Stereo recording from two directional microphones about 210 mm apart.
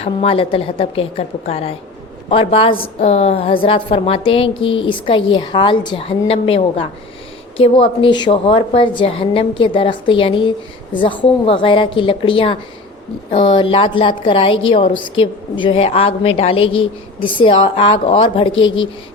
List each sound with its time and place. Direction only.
0.0 s a woman's voice: 30° left (ahead or behind)